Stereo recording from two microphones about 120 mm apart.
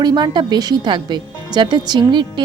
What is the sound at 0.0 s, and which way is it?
A woman's voice, 35° right (ahead or behind).